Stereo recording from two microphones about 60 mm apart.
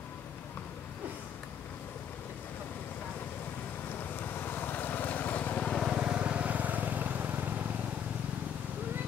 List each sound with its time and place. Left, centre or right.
4.2 s vehicle: left
5.7 s vehicle: centre
5.9 s vehicle: centre